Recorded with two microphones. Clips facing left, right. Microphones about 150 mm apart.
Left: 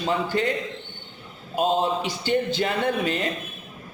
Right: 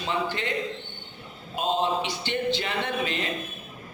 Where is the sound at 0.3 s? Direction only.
40° left (ahead or behind).